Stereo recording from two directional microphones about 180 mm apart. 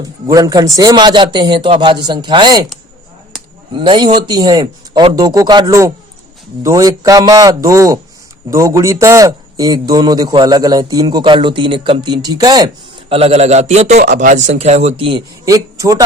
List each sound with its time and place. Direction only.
0.0 s a man's voice: 20° right (ahead or behind)
3.7 s a man's voice: 25° right (ahead or behind)
15.5 s a man's voice: 20° right (ahead or behind)